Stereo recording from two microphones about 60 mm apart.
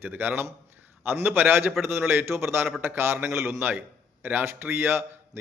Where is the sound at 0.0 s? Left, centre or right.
Right.